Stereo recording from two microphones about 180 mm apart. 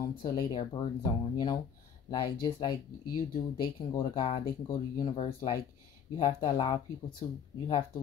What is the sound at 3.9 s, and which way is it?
Speech, 30° left (ahead or behind).